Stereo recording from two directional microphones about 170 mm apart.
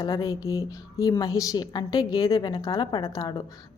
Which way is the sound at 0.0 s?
20° left (ahead or behind).